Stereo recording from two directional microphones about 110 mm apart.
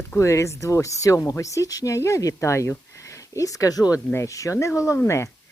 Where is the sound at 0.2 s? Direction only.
25° left (ahead or behind).